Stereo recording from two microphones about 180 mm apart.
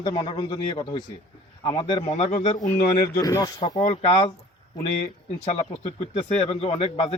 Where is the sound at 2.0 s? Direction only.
40° left (ahead or behind).